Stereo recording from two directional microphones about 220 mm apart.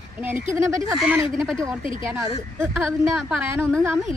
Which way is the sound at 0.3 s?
10° right (ahead or behind).